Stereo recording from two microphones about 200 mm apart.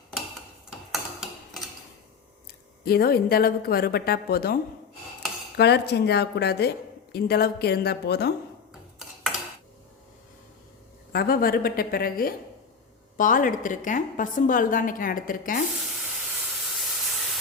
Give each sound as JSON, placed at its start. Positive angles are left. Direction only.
{"t": 0.7, "sound": "tick-tock", "side_deg": 0}
{"t": 2.8, "sound": "a woman's voice", "side_deg": 50}
{"t": 5.5, "sound": "a woman's voice", "side_deg": 55}
{"t": 11.1, "sound": "a woman's voice", "side_deg": 50}
{"t": 16.8, "sound": "steam", "side_deg": 0}